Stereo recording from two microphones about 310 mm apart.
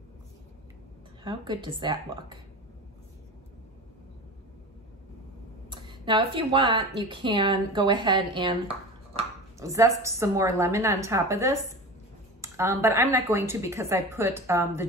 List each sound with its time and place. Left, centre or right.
1.2 s speech: centre
5.7 s speech: centre